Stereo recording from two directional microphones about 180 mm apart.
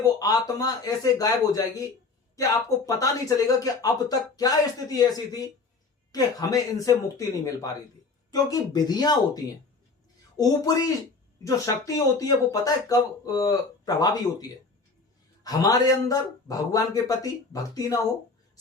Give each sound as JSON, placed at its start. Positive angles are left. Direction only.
{"t": 0.2, "sound": "a man's voice", "side_deg": 20}